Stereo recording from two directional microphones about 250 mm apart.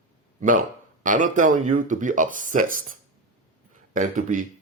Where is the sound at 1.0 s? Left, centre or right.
Right.